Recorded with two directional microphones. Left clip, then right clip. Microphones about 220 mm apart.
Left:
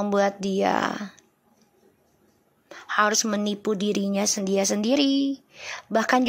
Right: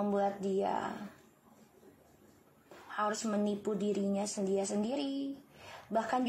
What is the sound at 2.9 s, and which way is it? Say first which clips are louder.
Speech: left 13 dB; 40° left (ahead or behind).